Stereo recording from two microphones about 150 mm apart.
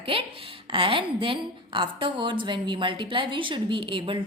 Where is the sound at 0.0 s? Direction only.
40° right (ahead or behind).